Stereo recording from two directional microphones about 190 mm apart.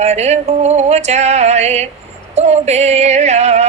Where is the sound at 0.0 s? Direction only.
35° right (ahead or behind).